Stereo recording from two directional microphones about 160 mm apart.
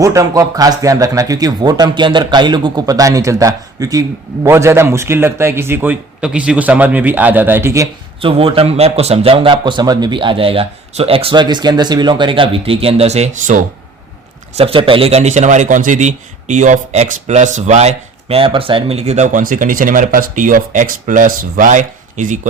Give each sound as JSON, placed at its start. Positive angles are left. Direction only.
{"t": 0.0, "sound": "a man's voice", "side_deg": -20}
{"t": 8.2, "sound": "a man's voice", "side_deg": -35}
{"t": 14.5, "sound": "a man's voice", "side_deg": -35}